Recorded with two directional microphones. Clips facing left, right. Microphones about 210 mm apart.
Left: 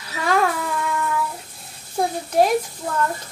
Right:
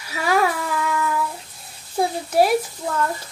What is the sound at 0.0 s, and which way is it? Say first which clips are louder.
Music: even; 5° right (ahead or behind).